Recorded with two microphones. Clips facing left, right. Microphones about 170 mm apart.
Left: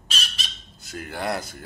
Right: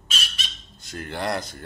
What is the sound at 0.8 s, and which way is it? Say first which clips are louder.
Speech: right 1 dB; 5° left (ahead or behind).